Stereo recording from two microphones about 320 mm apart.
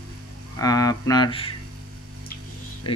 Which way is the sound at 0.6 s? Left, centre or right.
Centre.